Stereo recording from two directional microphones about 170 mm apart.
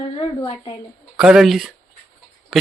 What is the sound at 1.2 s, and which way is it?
Speech, 5° right (ahead or behind).